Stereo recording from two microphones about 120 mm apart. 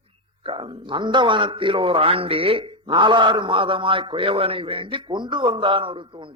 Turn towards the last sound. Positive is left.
turn(degrees=-45)  # may be behind; listen again after turning